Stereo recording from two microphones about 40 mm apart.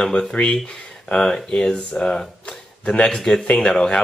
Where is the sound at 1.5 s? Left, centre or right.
Centre.